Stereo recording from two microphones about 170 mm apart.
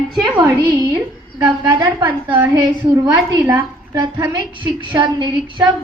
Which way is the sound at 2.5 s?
25° right (ahead or behind).